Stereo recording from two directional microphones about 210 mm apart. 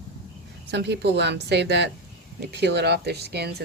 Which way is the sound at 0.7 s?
55° right (ahead or behind).